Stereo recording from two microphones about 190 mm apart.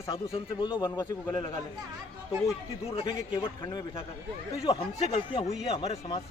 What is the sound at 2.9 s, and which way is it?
Speech, 30° left (ahead or behind).